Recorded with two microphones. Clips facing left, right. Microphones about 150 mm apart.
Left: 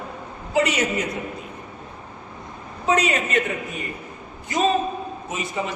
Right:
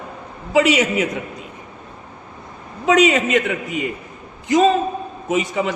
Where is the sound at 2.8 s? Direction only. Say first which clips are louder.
Right 7 dB; 90° right.